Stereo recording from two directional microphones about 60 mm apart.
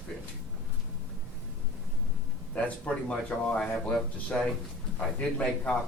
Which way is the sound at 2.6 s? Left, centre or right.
Left.